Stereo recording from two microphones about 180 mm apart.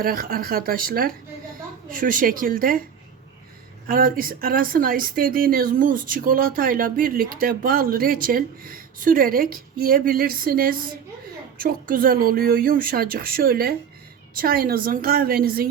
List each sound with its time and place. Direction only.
0.0 s speech: 55° right (ahead or behind)
3.8 s speech: 50° right (ahead or behind)